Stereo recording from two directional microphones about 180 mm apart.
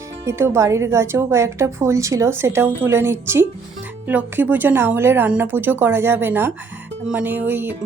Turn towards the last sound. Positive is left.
turn(degrees=-10)  # may be behind; listen again after turning